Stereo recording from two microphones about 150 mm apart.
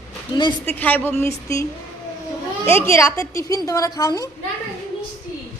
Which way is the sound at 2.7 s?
15° left (ahead or behind).